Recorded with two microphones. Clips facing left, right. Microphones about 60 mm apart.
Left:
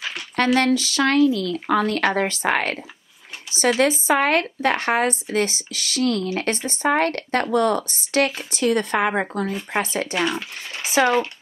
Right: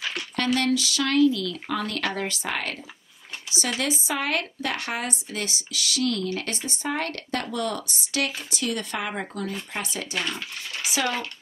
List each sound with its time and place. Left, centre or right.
0.6 s speech: left
10.8 s speech: left